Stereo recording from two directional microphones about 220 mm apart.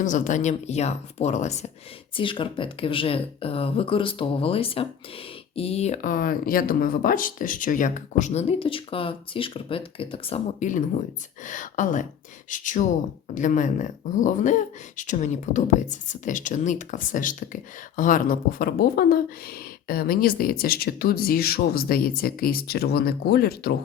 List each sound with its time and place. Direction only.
0.0 s speech: 35° left (ahead or behind)